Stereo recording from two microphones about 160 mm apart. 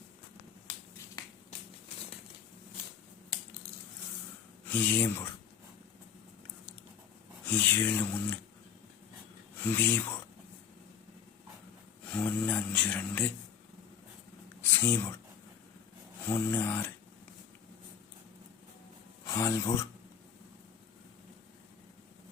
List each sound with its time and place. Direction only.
4.6 s speech: 10° left (ahead or behind)
7.4 s speech: 10° left (ahead or behind)
9.6 s speech: 10° left (ahead or behind)
12.0 s speech: 10° left (ahead or behind)
14.6 s a sound: 15° left (ahead or behind)
16.3 s speech: 15° left (ahead or behind)
19.3 s speech: 20° left (ahead or behind)